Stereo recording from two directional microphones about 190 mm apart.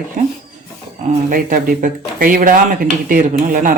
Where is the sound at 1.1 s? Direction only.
45° right (ahead or behind).